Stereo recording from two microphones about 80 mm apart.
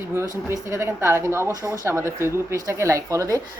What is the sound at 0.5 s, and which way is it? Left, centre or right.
A woman's voice, right.